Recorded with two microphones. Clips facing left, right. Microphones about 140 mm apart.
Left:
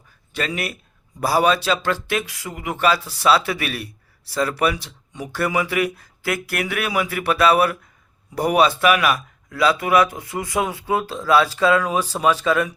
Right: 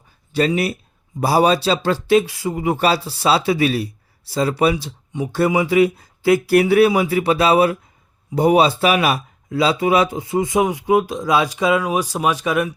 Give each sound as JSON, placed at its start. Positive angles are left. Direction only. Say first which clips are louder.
{"t": 0.3, "sound": "speech", "louder": "right 8 dB", "side_deg": -30}